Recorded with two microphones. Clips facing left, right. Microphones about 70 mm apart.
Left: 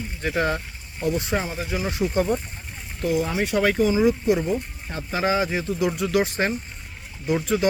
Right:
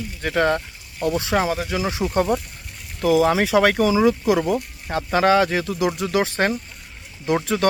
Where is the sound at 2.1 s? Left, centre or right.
Right.